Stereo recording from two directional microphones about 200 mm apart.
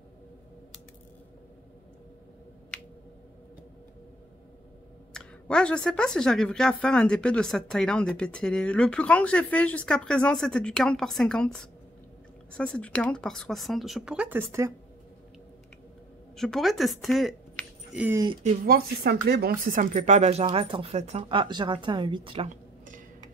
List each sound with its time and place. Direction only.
5.1 s a woman's voice: 5° left (ahead or behind); by 14.7 s 10° right (ahead or behind)
16.3 s speech: centre (ahead or behind)
18.4 s speech: 50° right (ahead or behind); by 22.5 s 25° right (ahead or behind)
22.5 s a sound: 40° right (ahead or behind)